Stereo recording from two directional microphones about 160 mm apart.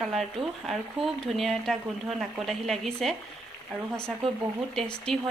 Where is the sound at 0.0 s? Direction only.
Centre (ahead or behind).